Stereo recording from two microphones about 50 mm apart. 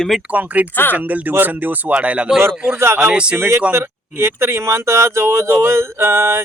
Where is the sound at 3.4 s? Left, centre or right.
Right.